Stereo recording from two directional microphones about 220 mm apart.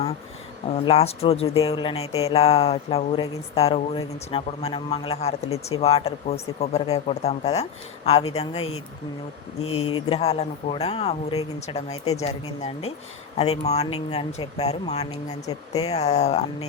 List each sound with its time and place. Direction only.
0.9 s speech: 25° left (ahead or behind)
9.6 s speech: 70° left (ahead or behind)
9.9 s speech: 25° left (ahead or behind)